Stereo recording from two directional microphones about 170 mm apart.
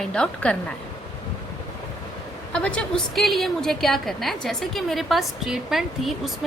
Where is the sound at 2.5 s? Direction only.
5° left (ahead or behind).